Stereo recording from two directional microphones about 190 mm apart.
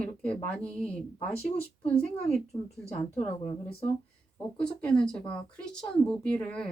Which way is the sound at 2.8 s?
30° left (ahead or behind).